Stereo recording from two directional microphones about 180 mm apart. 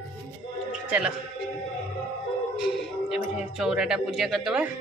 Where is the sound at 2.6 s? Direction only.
Centre (ahead or behind).